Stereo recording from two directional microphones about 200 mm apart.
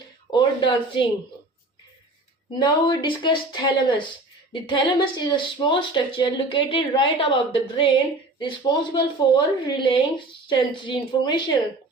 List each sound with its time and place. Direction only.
0.3 s speech: 25° left (ahead or behind)
2.6 s speech: 20° left (ahead or behind)